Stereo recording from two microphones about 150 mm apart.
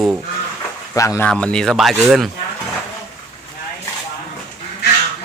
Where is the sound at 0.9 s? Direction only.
20° left (ahead or behind).